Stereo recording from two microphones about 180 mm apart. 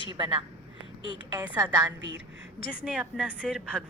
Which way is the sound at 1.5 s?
20° right (ahead or behind).